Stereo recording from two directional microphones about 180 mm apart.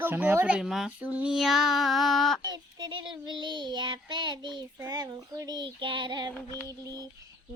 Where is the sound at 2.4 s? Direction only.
25° right (ahead or behind).